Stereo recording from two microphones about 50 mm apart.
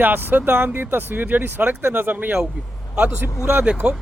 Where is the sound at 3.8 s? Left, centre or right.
Right.